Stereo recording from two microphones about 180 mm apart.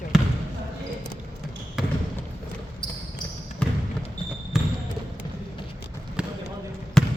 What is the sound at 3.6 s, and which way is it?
Trickle, 5° left (ahead or behind).